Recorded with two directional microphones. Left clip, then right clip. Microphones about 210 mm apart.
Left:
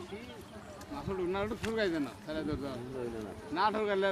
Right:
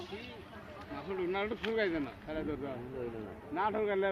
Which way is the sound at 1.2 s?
40° left (ahead or behind).